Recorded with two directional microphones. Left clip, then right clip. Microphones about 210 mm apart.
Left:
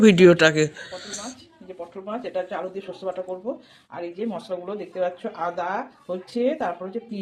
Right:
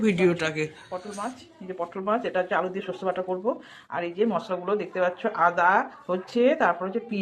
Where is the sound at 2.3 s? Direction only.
10° right (ahead or behind).